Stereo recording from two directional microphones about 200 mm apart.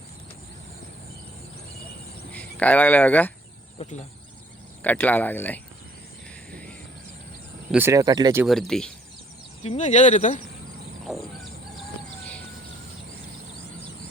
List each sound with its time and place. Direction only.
2.3 s speech: 10° left (ahead or behind)
3.8 s insect: 35° left (ahead or behind)
4.8 s speech: 10° left (ahead or behind)
6.5 s a sound: 5° left (ahead or behind)
7.7 s speech: 10° right (ahead or behind)
8.4 s speech: centre (ahead or behind)
9.6 s speech: 35° left (ahead or behind)
11.0 s a sound: centre (ahead or behind)